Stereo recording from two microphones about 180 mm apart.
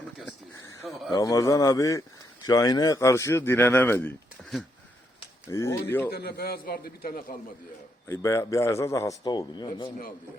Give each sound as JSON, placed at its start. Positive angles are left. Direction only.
{"t": 0.0, "sound": "a sound", "side_deg": 0}
{"t": 0.9, "sound": "speech", "side_deg": 0}
{"t": 1.1, "sound": "speech", "side_deg": 20}
{"t": 5.5, "sound": "a man's voice", "side_deg": 15}
{"t": 6.1, "sound": "a man's voice", "side_deg": 60}
{"t": 8.0, "sound": "a man's voice", "side_deg": 15}